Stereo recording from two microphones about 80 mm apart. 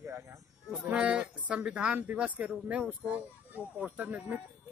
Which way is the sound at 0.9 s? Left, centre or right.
Centre.